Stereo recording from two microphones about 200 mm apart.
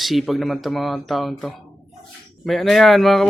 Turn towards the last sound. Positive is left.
turn(degrees=0)  # may be behind; listen again after turning